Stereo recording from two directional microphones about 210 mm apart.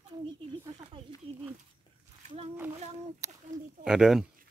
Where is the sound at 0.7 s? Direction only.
25° right (ahead or behind).